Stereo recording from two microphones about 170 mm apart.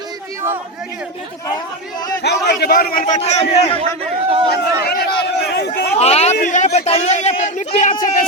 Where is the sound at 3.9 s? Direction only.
35° right (ahead or behind).